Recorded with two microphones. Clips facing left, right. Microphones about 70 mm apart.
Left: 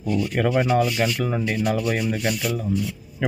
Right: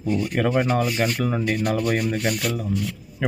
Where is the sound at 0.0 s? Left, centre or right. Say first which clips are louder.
Even; right.